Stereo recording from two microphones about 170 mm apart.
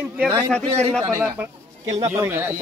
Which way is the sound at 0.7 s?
35° right (ahead or behind).